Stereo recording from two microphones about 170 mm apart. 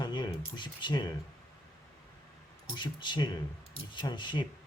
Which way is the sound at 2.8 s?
25° left (ahead or behind).